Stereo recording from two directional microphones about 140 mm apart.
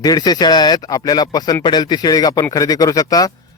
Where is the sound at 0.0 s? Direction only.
30° left (ahead or behind).